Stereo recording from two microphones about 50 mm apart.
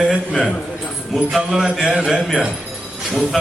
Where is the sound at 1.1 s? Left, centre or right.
Centre.